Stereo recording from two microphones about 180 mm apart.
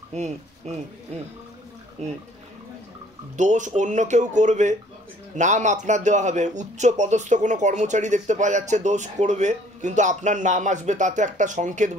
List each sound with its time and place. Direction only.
0.1 s speech: 40° right (ahead or behind)
2.0 s speech: 40° right (ahead or behind)
3.3 s speech: 45° right (ahead or behind)